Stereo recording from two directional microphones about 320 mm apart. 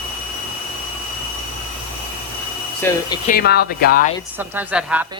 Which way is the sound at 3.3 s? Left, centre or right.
Left.